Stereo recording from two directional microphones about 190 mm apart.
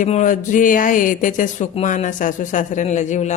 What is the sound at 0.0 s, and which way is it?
Speech, 40° left (ahead or behind).